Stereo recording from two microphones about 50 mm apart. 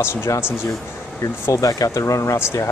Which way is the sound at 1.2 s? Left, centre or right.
Left.